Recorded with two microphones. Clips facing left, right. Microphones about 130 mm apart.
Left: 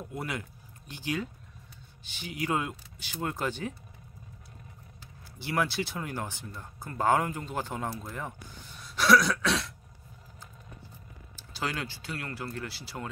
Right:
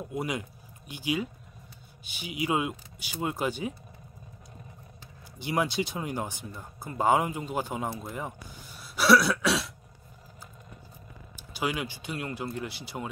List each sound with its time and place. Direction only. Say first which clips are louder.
0.1 s speech: right 4 dB; 15° right (ahead or behind)
5.4 s speech: right 2 dB; 15° right (ahead or behind)
11.3 s speech: right 3 dB; 15° right (ahead or behind)